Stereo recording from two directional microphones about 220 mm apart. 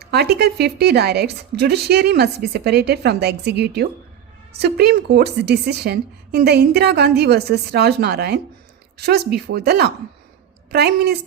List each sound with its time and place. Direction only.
0.0 s a woman's voice: 50° right (ahead or behind)